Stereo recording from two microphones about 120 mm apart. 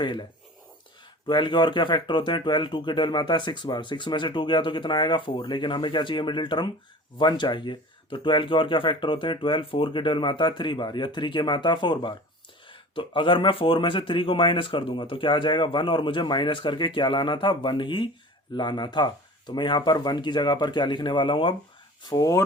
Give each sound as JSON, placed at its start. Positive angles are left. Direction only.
{"t": 0.0, "sound": "speech", "side_deg": 40}
{"t": 1.3, "sound": "speech", "side_deg": 40}
{"t": 22.0, "sound": "speech", "side_deg": 30}